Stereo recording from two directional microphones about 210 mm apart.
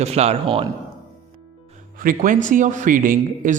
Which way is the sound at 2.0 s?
40° right (ahead or behind).